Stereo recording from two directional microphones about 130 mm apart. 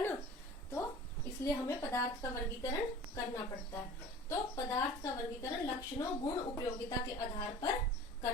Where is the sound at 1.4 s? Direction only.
25° left (ahead or behind).